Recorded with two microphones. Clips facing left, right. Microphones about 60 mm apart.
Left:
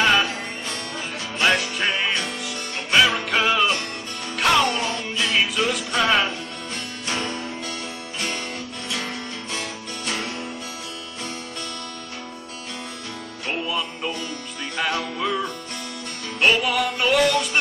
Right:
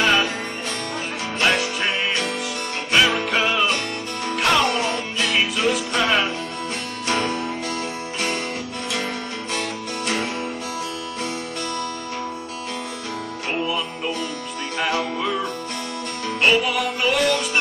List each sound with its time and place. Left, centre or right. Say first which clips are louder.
0.0 s music: even; centre
1.4 s music: even; centre
7.1 s music: right 5 dB; right
9.5 s music: right 6 dB; right
13.5 s music: right 1 dB; centre